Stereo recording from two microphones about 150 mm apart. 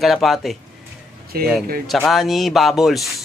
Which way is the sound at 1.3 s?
90° right.